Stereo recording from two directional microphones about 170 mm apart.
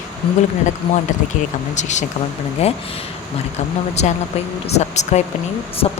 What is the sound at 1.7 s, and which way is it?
Speech, 45° left (ahead or behind).